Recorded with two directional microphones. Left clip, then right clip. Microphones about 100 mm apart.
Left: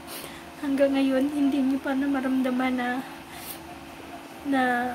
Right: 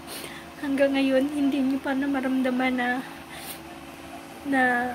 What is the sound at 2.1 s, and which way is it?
Speech, 20° left (ahead or behind).